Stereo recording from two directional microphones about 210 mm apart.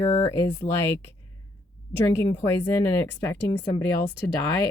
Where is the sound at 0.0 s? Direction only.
10° left (ahead or behind).